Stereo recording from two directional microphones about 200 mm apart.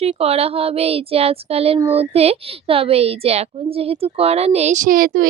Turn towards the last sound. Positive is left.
turn(degrees=-45)  # may be behind; listen again after turning